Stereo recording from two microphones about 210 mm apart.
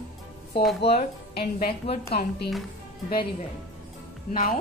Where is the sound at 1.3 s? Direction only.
50° left (ahead or behind).